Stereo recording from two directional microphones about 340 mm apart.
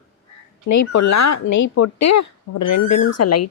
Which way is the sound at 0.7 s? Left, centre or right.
Left.